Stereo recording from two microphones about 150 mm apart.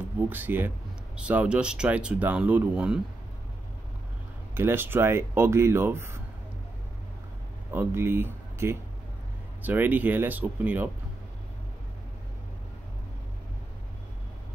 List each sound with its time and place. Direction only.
0.3 s speech: 15° right (ahead or behind)
4.6 s speech: 15° right (ahead or behind)
7.7 s speech: 15° right (ahead or behind)